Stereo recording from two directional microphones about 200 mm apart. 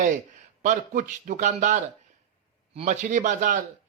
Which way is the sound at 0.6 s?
40° right (ahead or behind).